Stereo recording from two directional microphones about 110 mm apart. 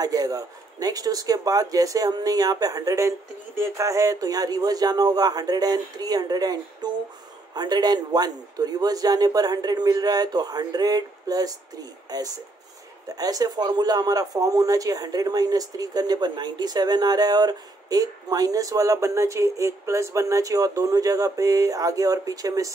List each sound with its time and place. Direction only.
0.0 s speech: 35° right (ahead or behind)